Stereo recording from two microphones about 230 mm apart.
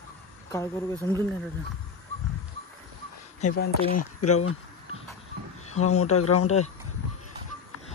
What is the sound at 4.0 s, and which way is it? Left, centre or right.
Speech, left.